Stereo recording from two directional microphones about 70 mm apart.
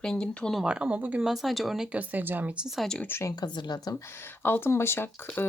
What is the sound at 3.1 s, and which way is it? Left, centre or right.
Speech, left.